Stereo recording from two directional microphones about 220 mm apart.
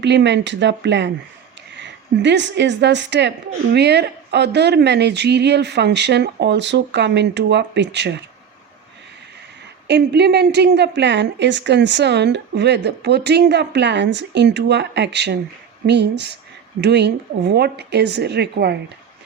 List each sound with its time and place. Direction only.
0.0 s a woman's voice: 50° right (ahead or behind)
9.8 s a woman's voice: 50° right (ahead or behind)